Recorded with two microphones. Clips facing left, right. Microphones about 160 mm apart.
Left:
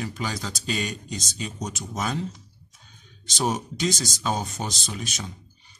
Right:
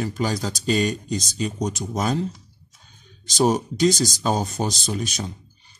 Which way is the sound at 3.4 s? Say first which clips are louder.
Right 7 dB; 40° right (ahead or behind).